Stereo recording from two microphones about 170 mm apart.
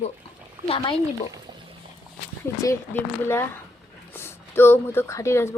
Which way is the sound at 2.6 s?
15° left (ahead or behind).